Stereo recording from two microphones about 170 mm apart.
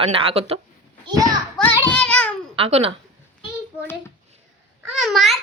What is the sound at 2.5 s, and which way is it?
Speech, 35° right (ahead or behind).